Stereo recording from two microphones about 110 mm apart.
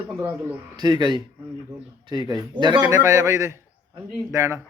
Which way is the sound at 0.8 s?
40° right (ahead or behind).